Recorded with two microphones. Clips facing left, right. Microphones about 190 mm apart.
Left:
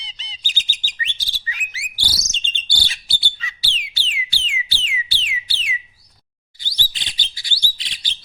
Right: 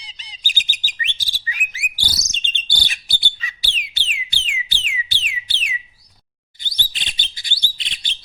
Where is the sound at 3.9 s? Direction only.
20° right (ahead or behind).